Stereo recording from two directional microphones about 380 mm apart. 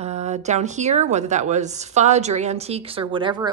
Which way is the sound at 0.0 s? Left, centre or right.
Centre.